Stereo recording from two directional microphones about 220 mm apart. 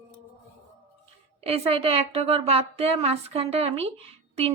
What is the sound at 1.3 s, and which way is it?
A woman's voice, 25° right (ahead or behind).